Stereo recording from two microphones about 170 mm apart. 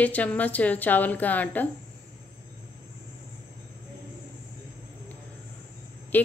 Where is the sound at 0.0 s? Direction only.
10° left (ahead or behind).